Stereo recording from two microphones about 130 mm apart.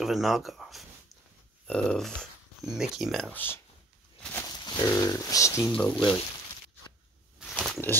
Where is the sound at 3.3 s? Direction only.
15° left (ahead or behind).